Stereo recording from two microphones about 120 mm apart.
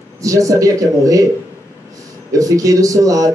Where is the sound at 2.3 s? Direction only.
30° right (ahead or behind).